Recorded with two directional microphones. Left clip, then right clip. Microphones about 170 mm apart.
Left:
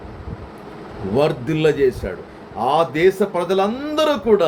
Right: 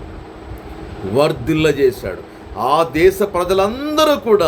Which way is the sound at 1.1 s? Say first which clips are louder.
Right 3 dB; 5° right (ahead or behind).